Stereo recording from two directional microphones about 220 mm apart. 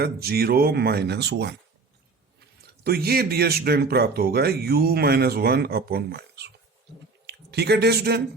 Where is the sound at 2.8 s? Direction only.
45° right (ahead or behind).